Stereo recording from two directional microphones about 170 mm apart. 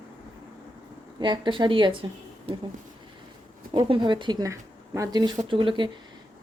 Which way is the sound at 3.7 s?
30° right (ahead or behind).